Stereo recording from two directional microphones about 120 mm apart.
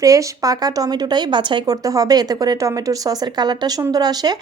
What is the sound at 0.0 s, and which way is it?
Speech, 30° right (ahead or behind).